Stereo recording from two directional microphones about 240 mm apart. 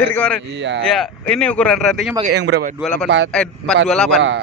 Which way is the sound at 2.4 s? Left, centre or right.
Right.